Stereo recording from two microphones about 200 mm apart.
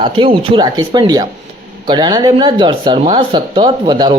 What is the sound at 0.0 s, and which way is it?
Speech, 25° right (ahead or behind).